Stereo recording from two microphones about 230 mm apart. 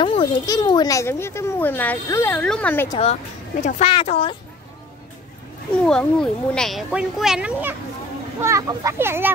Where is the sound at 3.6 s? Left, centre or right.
Left.